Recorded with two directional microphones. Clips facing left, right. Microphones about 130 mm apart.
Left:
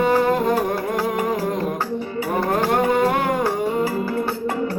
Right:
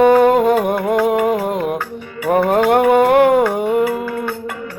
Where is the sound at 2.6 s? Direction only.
60° right (ahead or behind).